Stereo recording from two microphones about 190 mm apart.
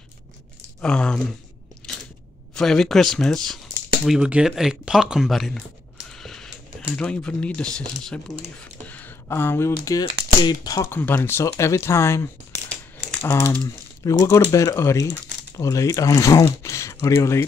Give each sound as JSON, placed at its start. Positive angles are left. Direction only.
{"t": 0.7, "sound": "speech", "side_deg": 5}
{"t": 1.8, "sound": "biting", "side_deg": 5}
{"t": 2.5, "sound": "speech", "side_deg": 5}
{"t": 6.1, "sound": "a sound", "side_deg": 5}
{"t": 8.8, "sound": "speech", "side_deg": 10}